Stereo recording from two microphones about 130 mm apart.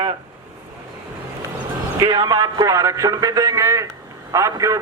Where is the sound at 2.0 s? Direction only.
30° right (ahead or behind).